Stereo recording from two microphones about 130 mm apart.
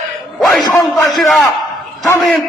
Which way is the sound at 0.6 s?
30° left (ahead or behind).